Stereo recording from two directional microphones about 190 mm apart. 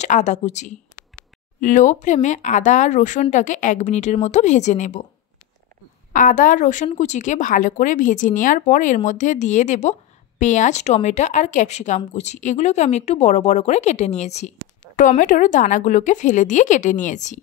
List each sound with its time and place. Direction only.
0.0 s a woman's voice: 40° left (ahead or behind)
6.1 s a woman's voice: 45° left (ahead or behind)